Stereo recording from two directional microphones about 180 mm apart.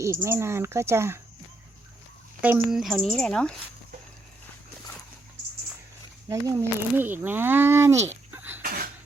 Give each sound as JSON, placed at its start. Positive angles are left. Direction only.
{"t": 0.0, "sound": "speech", "side_deg": -15}
{"t": 2.4, "sound": "speech", "side_deg": -5}
{"t": 6.2, "sound": "speech", "side_deg": -20}
{"t": 8.3, "sound": "cough", "side_deg": -10}
{"t": 8.6, "sound": "a sound", "side_deg": -55}